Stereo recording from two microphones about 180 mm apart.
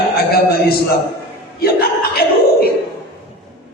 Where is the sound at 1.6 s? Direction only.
60° left (ahead or behind).